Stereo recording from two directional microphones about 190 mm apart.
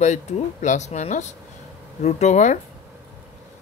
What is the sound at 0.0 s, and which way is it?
Speech, 40° left (ahead or behind).